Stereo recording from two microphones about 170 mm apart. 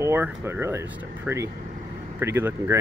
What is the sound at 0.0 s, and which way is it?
Speech, 15° right (ahead or behind).